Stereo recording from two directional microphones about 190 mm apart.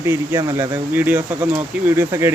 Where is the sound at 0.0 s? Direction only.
15° right (ahead or behind).